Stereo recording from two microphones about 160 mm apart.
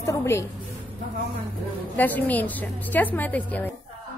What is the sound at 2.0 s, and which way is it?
A woman's voice, 10° left (ahead or behind).